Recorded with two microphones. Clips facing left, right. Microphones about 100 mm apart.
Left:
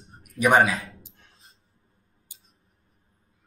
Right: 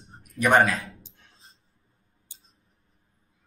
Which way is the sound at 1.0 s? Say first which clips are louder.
Even; 30° right (ahead or behind).